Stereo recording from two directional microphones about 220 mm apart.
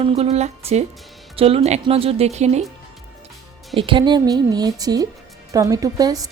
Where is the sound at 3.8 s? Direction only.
20° right (ahead or behind).